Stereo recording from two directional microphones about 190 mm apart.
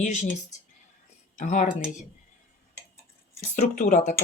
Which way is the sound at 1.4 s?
40° left (ahead or behind).